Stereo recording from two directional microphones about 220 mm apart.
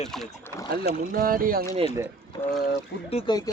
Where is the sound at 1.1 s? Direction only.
40° right (ahead or behind).